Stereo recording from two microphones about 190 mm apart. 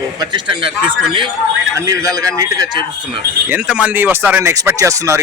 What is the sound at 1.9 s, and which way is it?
Speech, 20° right (ahead or behind).